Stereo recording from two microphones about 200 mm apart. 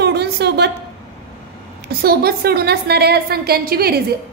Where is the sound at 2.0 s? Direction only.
50° right (ahead or behind).